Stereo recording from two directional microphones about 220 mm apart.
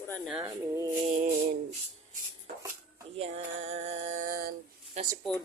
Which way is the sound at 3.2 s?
30° right (ahead or behind).